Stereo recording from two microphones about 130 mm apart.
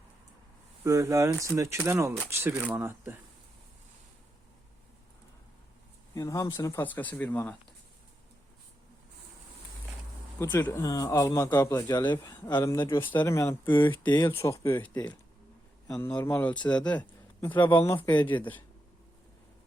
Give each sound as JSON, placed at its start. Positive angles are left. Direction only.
{"t": 0.9, "sound": "speech", "side_deg": -25}
{"t": 2.5, "sound": "speech", "side_deg": -10}
{"t": 6.1, "sound": "speech", "side_deg": 25}
{"t": 10.4, "sound": "speech", "side_deg": 15}
{"t": 12.2, "sound": "speech", "side_deg": 15}
{"t": 12.5, "sound": "speech", "side_deg": 30}
{"t": 13.0, "sound": "speech", "side_deg": 15}
{"t": 14.0, "sound": "speech", "side_deg": 35}
{"t": 14.3, "sound": "speech", "side_deg": 20}
{"t": 18.1, "sound": "speech", "side_deg": 35}
{"t": 18.3, "sound": "speech", "side_deg": 15}